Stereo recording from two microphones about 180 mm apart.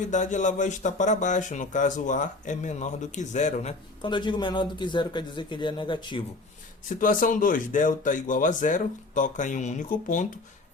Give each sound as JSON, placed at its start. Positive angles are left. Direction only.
{"t": 0.1, "sound": "speech", "side_deg": 45}
{"t": 4.0, "sound": "a man's voice", "side_deg": 25}
{"t": 6.8, "sound": "speech", "side_deg": 50}